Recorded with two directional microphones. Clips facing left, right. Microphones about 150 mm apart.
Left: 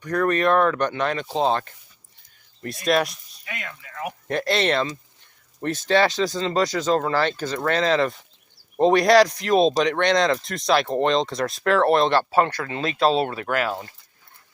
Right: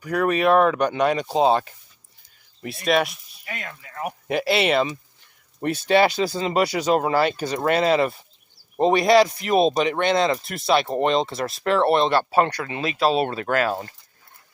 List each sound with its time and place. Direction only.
0.0 s speech: 10° right (ahead or behind)
2.8 s speech: centre (ahead or behind)
3.4 s speech: 35° right (ahead or behind)
4.3 s speech: 5° right (ahead or behind)
12.3 s speech: 15° right (ahead or behind)
13.5 s speech: 30° right (ahead or behind)